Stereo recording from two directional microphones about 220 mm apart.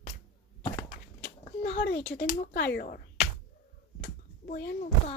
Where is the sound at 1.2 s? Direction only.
50° left (ahead or behind).